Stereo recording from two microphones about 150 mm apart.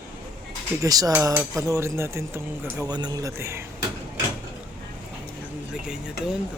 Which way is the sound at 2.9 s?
25° right (ahead or behind).